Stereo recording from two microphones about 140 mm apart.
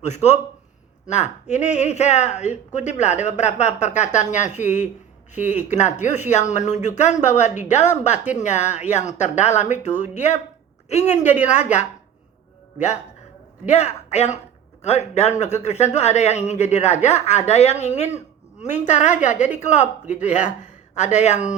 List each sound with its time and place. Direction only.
0.0 s speech: 55° left (ahead or behind)
13.7 s speech: 55° left (ahead or behind)